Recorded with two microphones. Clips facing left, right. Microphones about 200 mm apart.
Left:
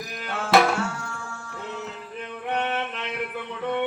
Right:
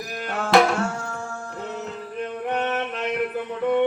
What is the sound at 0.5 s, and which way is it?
Music, centre (ahead or behind).